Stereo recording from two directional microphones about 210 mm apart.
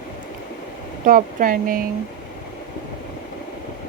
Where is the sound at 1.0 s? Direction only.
40° right (ahead or behind).